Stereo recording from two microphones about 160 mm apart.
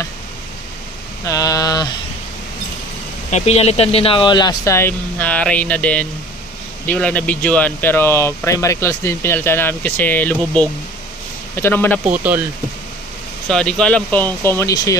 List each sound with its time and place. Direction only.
1.2 s speech: 20° left (ahead or behind)
3.3 s speech: 45° left (ahead or behind); by 12.0 s 15° left (ahead or behind)
12.0 s speech: 10° right (ahead or behind)
13.5 s speech: 5° left (ahead or behind); by 15.0 s 20° left (ahead or behind)